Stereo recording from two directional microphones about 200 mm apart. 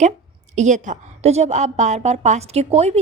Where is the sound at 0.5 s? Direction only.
35° right (ahead or behind).